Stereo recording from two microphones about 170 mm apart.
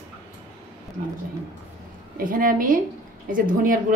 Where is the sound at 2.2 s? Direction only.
55° right (ahead or behind).